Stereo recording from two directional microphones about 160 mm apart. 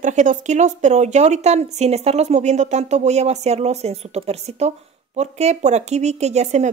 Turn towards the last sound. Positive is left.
turn(degrees=-45)  # may be behind; listen again after turning